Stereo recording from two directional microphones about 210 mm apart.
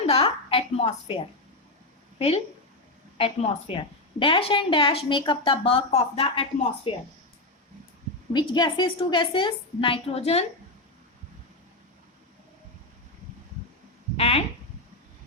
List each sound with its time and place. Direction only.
0.0 s a sound: 30° left (ahead or behind)
2.1 s a woman's voice: 30° left (ahead or behind)
8.3 s a woman's voice: 20° left (ahead or behind)
14.2 s a woman's voice: 30° left (ahead or behind)